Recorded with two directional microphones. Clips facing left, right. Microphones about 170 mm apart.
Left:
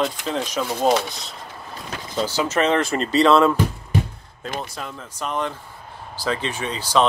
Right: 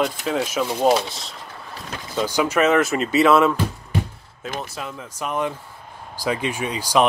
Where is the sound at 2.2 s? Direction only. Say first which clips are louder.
Right 2 dB; 15° right (ahead or behind).